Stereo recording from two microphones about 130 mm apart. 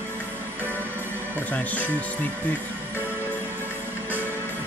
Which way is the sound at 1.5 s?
10° left (ahead or behind).